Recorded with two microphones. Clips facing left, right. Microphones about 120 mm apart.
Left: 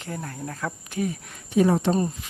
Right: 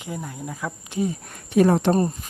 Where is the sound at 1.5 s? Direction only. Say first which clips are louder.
Right 3 dB; 65° right (ahead or behind).